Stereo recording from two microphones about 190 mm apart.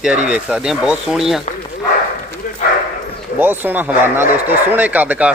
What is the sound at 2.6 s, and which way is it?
Bow-wow, 45° left (ahead or behind).